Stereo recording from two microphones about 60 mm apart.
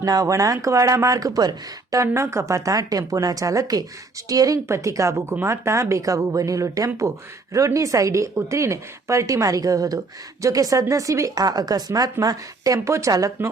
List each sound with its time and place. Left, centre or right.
0.0 s speech: right
2.1 s speech: right
4.7 s speech: right
12.9 s speech: right